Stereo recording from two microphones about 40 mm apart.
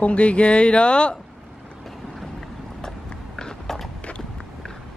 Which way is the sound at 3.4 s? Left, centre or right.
Centre.